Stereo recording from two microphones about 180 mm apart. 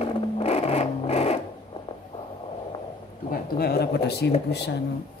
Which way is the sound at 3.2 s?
60° left (ahead or behind).